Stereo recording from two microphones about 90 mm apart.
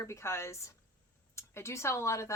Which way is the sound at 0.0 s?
30° left (ahead or behind).